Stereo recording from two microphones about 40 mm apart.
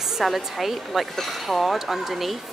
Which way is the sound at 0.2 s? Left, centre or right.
Centre.